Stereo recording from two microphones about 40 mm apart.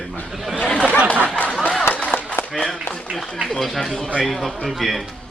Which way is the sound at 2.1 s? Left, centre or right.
Left.